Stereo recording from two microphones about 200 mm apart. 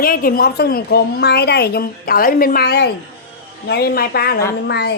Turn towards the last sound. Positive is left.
turn(degrees=55)  # may be behind; listen again after turning